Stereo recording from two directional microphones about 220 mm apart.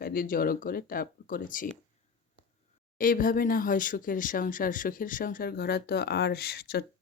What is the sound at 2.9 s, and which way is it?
Speech, 40° left (ahead or behind).